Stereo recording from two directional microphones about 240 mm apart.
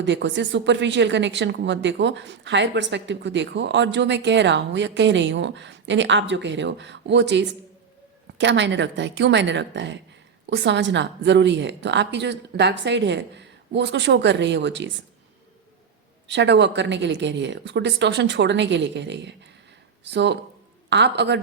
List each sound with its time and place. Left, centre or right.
0.0 s a woman's voice: right
16.2 s a woman's voice: right